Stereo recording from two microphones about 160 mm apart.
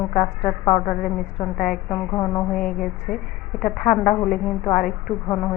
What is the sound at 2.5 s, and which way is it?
A woman's voice, 5° left (ahead or behind).